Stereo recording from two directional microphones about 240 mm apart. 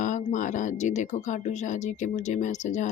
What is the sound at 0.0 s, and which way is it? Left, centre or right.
Speech, left.